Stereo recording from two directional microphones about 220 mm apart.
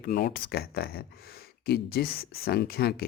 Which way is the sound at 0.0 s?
45° left (ahead or behind).